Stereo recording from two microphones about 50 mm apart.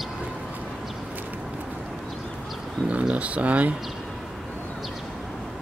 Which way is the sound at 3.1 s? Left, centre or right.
Right.